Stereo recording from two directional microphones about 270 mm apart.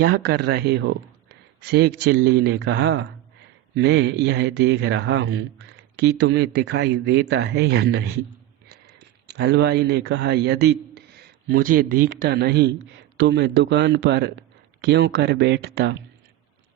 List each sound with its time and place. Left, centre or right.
0.0 s a man's voice: right